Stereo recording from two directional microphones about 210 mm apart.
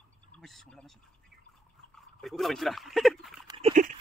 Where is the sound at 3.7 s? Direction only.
35° right (ahead or behind).